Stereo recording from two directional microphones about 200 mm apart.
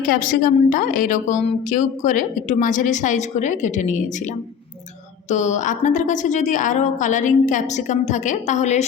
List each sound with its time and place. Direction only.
0.1 s a woman's voice: 45° left (ahead or behind)